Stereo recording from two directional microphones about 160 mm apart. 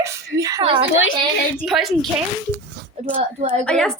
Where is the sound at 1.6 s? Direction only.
Centre (ahead or behind).